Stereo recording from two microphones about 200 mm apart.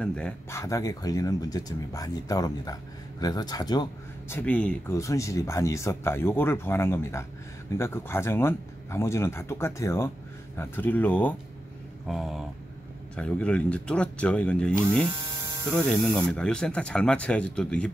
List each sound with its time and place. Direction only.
0.0 s speech: 5° left (ahead or behind); by 4.4 s 20° left (ahead or behind)
4.4 s speech: 5° left (ahead or behind)
15.4 s hum: 15° right (ahead or behind)
15.8 s speech: 5° left (ahead or behind)